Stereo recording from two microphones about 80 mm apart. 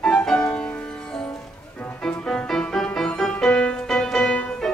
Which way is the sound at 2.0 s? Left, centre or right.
Centre.